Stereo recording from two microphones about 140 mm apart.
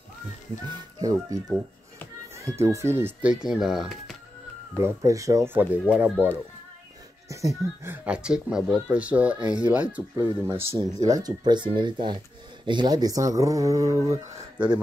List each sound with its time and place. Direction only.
0.7 s speech: 30° right (ahead or behind)
2.4 s speech: 20° right (ahead or behind); by 4.2 s centre (ahead or behind)
4.7 s speech: 20° right (ahead or behind)